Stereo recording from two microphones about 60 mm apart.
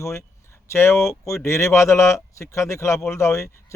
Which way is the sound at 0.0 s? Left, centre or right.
Left.